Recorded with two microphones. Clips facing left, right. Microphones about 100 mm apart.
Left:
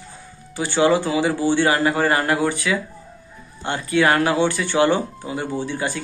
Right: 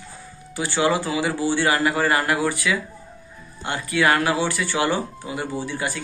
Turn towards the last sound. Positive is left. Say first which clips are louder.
# left 2 dB
turn(degrees=25)  # may be behind; listen again after turning